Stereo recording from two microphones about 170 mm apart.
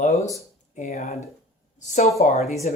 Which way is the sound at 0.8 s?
40° left (ahead or behind).